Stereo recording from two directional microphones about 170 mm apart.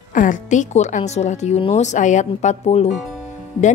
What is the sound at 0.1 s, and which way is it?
A woman's voice, 50° left (ahead or behind).